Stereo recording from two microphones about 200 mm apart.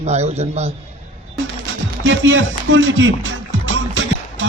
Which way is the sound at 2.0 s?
70° right (ahead or behind).